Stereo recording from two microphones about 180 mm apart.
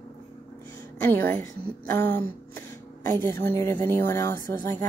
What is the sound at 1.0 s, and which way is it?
A woman's voice, 10° left (ahead or behind).